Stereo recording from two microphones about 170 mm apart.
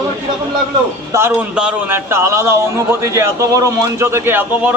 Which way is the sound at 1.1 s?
10° right (ahead or behind).